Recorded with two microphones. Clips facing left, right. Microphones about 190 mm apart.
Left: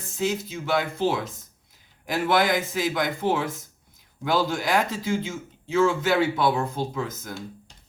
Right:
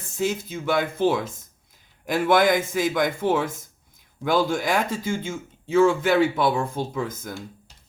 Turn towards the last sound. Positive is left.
turn(degrees=-50)  # may be behind; listen again after turning